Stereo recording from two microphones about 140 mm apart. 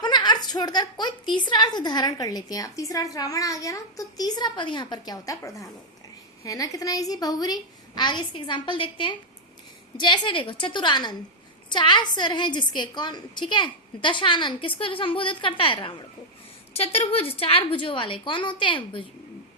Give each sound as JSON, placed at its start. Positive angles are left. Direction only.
{"t": 0.0, "sound": "a woman's voice", "side_deg": 30}
{"t": 16.7, "sound": "a woman's voice", "side_deg": 45}